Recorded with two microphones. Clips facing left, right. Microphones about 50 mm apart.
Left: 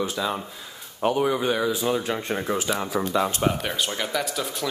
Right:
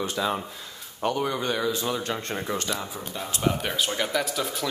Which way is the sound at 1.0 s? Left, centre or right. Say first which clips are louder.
Left 4 dB; centre.